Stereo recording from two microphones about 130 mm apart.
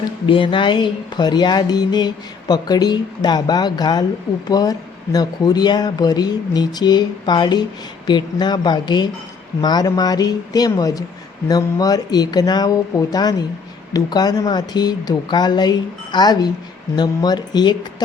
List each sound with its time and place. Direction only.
0.3 s speech: 40° left (ahead or behind)